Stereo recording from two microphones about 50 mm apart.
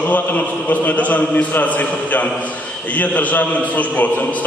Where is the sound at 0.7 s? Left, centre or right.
Left.